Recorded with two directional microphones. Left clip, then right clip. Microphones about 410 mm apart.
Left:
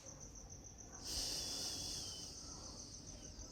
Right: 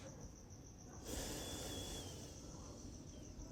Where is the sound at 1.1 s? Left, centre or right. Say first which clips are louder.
Left 5 dB; centre.